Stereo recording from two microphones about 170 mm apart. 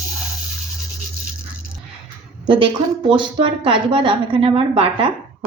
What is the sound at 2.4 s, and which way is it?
A woman's voice, 30° right (ahead or behind).